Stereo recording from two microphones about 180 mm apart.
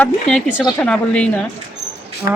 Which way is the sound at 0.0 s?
5° left (ahead or behind).